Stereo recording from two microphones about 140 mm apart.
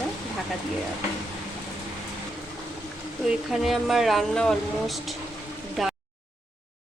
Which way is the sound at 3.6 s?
Centre (ahead or behind).